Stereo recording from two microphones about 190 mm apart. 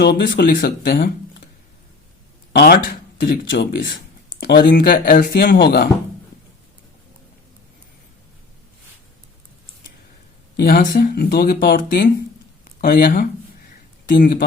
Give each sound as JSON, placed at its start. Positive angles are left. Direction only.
{"t": 0.0, "sound": "speech", "side_deg": 65}
{"t": 2.5, "sound": "speech", "side_deg": 55}
{"t": 10.6, "sound": "speech", "side_deg": 55}